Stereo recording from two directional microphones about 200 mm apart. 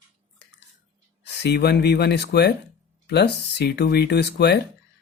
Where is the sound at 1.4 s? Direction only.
55° left (ahead or behind).